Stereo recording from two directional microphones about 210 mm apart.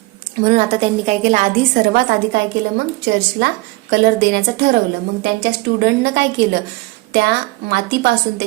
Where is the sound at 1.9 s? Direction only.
50° right (ahead or behind).